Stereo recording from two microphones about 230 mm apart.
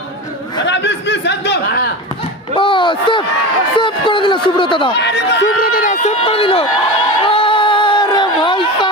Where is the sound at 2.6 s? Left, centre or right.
Left.